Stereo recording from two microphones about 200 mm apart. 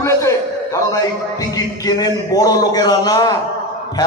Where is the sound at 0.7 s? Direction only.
20° left (ahead or behind).